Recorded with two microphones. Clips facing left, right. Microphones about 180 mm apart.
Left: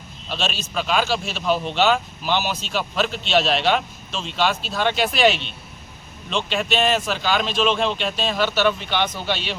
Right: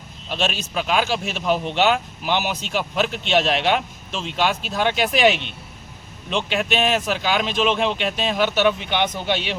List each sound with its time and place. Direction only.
0.3 s a man's voice: 15° right (ahead or behind)